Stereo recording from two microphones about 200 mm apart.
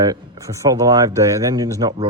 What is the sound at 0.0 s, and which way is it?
A man's voice, 15° right (ahead or behind).